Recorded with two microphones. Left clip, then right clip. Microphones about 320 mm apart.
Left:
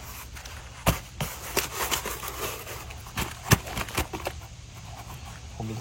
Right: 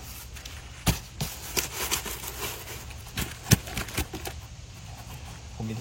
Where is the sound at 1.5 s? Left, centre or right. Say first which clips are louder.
Left 2 dB; centre.